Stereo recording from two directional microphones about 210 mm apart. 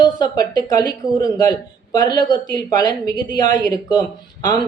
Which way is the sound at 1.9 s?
20° left (ahead or behind).